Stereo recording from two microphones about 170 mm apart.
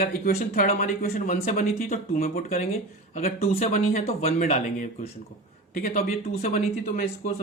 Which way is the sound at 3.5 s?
45° left (ahead or behind).